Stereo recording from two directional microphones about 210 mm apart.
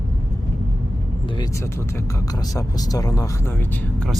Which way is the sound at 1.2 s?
20° left (ahead or behind).